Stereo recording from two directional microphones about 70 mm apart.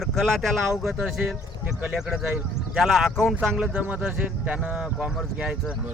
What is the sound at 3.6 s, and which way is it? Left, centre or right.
A man's voice, centre.